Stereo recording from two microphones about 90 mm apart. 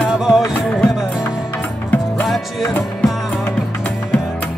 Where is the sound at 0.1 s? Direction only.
5° right (ahead or behind).